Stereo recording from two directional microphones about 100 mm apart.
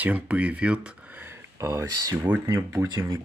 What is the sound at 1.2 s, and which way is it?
Speech, 25° right (ahead or behind).